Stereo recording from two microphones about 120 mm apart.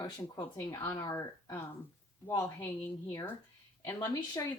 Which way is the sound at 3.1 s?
25° left (ahead or behind).